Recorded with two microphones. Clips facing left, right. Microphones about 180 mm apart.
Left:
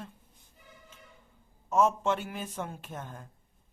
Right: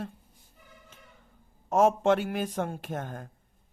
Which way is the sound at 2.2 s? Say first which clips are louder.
Right 8 dB; 85° right.